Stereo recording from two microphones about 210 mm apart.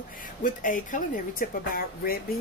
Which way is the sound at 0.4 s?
40° left (ahead or behind).